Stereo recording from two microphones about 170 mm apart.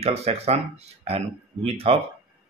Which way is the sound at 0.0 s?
35° right (ahead or behind).